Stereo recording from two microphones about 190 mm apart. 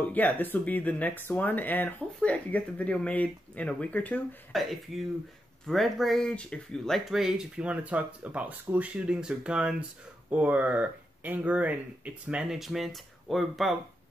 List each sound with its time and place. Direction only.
0.0 s speech: 10° left (ahead or behind)